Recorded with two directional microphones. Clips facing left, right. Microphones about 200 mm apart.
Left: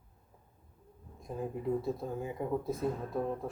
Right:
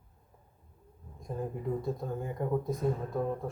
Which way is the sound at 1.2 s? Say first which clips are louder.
Right 1 dB; 5° left (ahead or behind).